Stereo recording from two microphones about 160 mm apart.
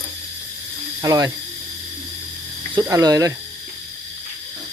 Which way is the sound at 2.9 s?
20° right (ahead or behind).